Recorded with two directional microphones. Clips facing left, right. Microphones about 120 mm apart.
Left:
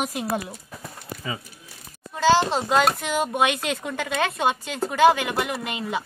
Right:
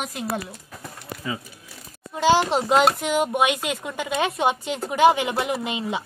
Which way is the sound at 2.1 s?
15° right (ahead or behind).